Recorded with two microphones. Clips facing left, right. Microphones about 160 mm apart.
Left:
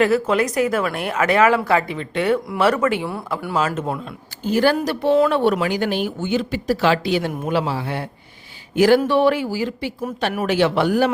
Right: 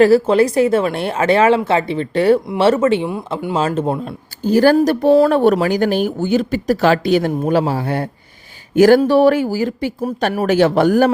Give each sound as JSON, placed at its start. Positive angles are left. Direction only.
{"t": 0.0, "sound": "speech", "side_deg": -30}